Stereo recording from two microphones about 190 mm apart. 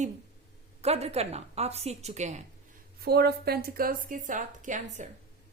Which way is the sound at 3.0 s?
55° right (ahead or behind).